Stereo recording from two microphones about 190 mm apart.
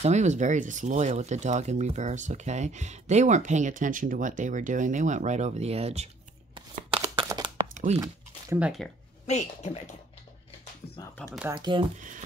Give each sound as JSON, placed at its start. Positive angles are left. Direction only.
{"t": 0.0, "sound": "speech", "side_deg": -35}
{"t": 6.5, "sound": "shuffling cards", "side_deg": -25}
{"t": 7.7, "sound": "a sound", "side_deg": -40}
{"t": 8.5, "sound": "speech", "side_deg": -5}
{"t": 9.3, "sound": "speech", "side_deg": 35}
{"t": 11.5, "sound": "speech", "side_deg": -25}